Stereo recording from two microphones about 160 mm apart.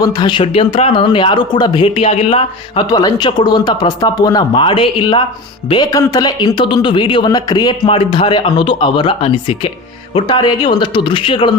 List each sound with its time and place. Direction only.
0.0 s speech: 25° left (ahead or behind)
2.9 s speech: 25° left (ahead or behind)